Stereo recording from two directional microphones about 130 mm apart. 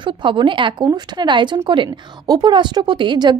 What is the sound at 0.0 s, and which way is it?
Speech, 40° right (ahead or behind).